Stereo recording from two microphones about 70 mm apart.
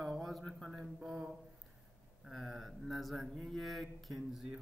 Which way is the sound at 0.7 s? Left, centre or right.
Centre.